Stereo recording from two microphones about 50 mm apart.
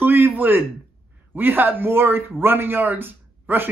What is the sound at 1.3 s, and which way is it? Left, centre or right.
A man's voice, right.